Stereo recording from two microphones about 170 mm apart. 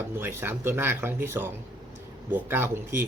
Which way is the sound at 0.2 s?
15° right (ahead or behind).